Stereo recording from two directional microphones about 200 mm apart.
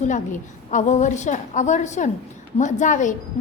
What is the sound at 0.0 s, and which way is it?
A woman's voice, 40° left (ahead or behind).